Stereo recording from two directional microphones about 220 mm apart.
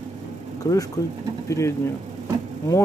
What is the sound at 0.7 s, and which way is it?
Speech, 15° left (ahead or behind).